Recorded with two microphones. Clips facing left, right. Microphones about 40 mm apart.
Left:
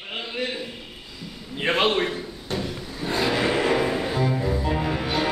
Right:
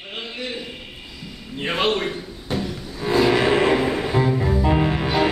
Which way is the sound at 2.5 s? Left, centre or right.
Centre.